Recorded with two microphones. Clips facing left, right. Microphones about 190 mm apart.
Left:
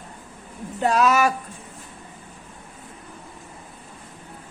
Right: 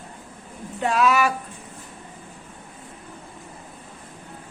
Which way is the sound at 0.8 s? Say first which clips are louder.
Left 1 dB; 40° left (ahead or behind).